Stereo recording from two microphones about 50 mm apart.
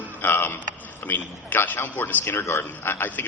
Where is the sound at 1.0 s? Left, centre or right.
Left.